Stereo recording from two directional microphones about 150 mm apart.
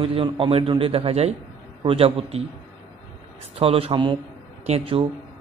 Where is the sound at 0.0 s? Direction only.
35° right (ahead or behind).